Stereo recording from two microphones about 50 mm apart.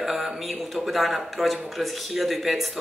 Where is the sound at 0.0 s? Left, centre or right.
Centre.